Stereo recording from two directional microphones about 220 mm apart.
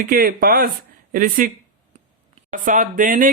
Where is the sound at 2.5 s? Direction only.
35° right (ahead or behind).